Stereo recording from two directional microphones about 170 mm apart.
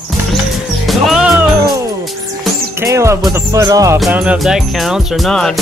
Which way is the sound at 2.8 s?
15° right (ahead or behind).